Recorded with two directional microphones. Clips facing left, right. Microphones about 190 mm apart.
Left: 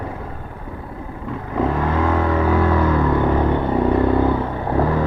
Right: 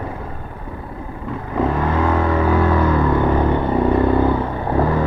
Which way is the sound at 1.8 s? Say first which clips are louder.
Right 1 dB; 20° right (ahead or behind).